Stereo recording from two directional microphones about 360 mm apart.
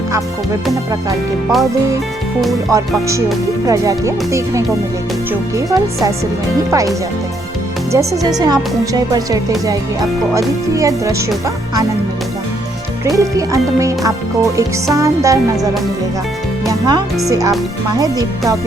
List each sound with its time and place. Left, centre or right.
2.4 s speech: centre
7.9 s speech: centre
13.1 s speech: centre
16.6 s music: centre
17.2 s speech: centre